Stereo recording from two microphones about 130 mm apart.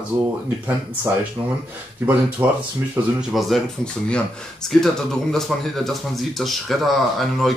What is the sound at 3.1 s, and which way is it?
Speech, centre (ahead or behind).